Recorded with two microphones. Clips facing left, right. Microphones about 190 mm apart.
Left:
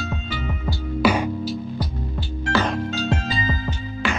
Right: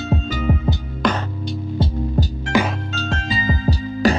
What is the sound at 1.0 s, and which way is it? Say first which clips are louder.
Music: left 3 dB; 10° left (ahead or behind).